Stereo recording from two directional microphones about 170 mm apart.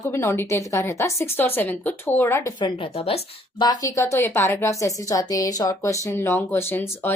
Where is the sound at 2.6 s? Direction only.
30° left (ahead or behind).